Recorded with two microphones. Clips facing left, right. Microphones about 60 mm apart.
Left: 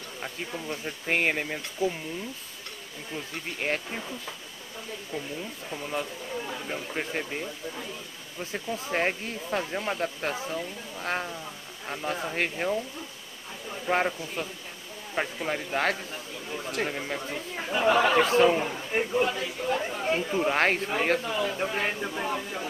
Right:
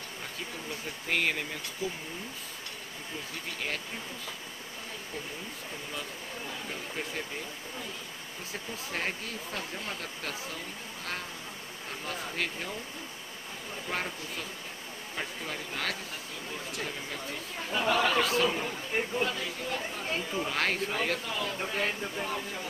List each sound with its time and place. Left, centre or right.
0.7 s speech: left
6.7 s speech: left
8.7 s speech: left
13.8 s speech: left
20.3 s speech: left
21.3 s speech: centre